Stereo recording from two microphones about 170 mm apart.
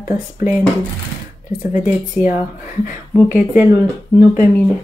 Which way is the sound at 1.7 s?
45° left (ahead or behind).